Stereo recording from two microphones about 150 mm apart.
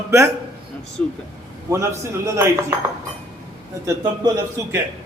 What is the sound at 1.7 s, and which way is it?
Speech, 20° right (ahead or behind).